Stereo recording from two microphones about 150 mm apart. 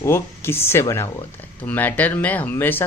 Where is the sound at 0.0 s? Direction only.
15° left (ahead or behind).